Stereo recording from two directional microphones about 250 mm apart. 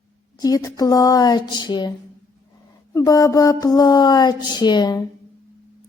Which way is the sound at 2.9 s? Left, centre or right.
Centre.